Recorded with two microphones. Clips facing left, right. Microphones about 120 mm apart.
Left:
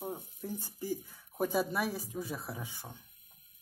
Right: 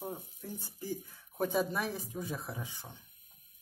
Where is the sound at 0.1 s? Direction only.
15° left (ahead or behind).